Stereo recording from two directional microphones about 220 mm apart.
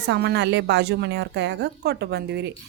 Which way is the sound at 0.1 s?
50° right (ahead or behind).